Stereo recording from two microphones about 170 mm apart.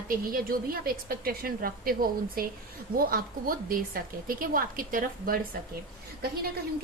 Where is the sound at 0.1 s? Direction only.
55° right (ahead or behind).